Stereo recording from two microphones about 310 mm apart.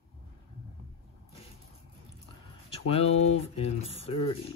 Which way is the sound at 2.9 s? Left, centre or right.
Centre.